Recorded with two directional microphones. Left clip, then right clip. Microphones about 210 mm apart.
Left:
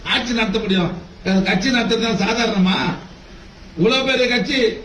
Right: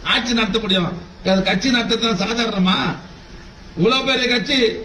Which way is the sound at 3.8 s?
55° right (ahead or behind).